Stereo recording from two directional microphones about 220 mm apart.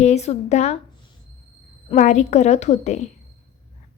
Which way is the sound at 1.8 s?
35° left (ahead or behind).